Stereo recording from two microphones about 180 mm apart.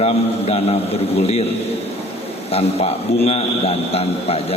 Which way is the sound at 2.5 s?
35° left (ahead or behind).